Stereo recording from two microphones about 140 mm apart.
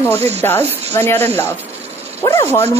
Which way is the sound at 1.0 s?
20° left (ahead or behind).